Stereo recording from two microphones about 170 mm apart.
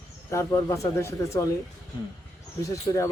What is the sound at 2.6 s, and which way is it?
Speech, 20° left (ahead or behind).